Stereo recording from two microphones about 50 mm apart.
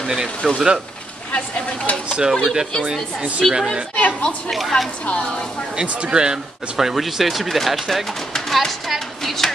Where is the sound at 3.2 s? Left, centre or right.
Right.